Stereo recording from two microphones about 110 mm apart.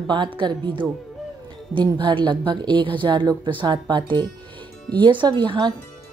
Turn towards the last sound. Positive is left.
turn(degrees=-45)  # may be behind; listen again after turning